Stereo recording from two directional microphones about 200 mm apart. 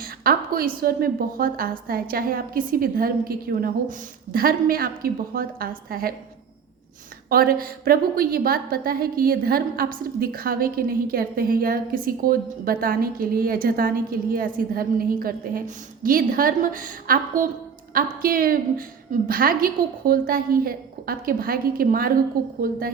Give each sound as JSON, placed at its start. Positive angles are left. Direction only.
{"t": 0.0, "sound": "a woman's voice", "side_deg": -50}
{"t": 7.3, "sound": "a woman's voice", "side_deg": -45}